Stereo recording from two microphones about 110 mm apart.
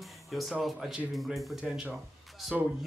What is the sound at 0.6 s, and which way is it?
Speech, 5° right (ahead or behind).